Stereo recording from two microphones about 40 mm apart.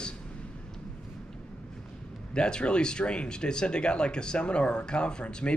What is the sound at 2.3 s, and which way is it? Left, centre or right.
Speech, left.